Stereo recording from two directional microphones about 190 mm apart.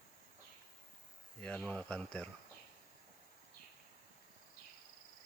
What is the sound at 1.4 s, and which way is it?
Speech, 5° left (ahead or behind).